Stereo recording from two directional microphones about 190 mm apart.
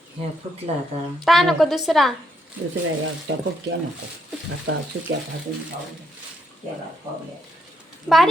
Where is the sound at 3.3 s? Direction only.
90° right.